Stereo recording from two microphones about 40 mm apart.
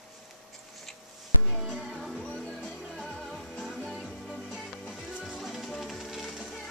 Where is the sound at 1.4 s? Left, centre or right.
Centre.